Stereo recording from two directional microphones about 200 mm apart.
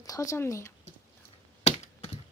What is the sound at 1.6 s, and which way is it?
Computer keyboard, 30° left (ahead or behind).